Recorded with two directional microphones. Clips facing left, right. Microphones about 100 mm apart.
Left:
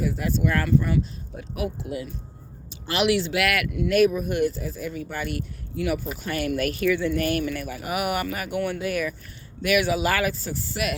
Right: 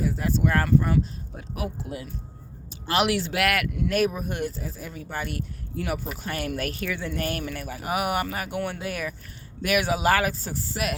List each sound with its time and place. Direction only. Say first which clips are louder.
0.1 s speech: even; 35° right (ahead or behind)